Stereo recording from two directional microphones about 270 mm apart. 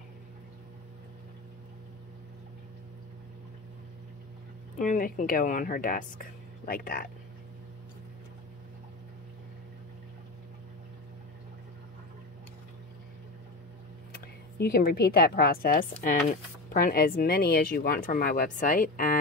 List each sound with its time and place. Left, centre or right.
4.7 s speech: left
14.2 s speech: left